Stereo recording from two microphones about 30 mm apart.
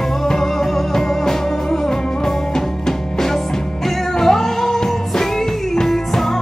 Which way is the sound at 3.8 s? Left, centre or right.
Centre.